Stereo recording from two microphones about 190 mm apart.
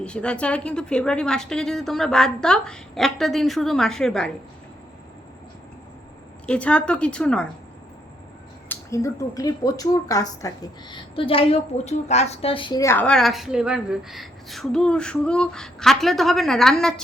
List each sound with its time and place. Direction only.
0.0 s a woman's voice: 5° left (ahead or behind)
6.4 s a woman's voice: 5° left (ahead or behind)
8.7 s speech: 15° left (ahead or behind)
12.8 s a woman's voice: 10° left (ahead or behind)